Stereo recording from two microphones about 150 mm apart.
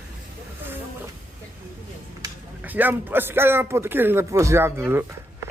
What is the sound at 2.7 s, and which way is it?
Speech, 10° right (ahead or behind).